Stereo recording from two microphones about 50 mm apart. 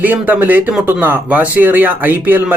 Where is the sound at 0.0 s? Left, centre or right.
Right.